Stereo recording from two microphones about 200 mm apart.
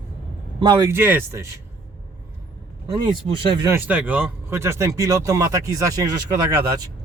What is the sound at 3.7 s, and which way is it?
Speech, 10° right (ahead or behind).